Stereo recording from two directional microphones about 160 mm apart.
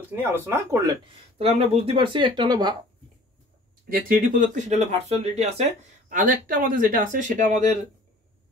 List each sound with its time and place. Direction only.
0.1 s speech: 15° right (ahead or behind)
1.4 s speech: 40° right (ahead or behind)
3.9 s speech: 60° right (ahead or behind); by 5.6 s 40° right (ahead or behind)
6.0 s speech: 60° right (ahead or behind)